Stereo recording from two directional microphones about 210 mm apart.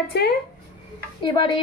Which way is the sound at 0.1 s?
50° left (ahead or behind).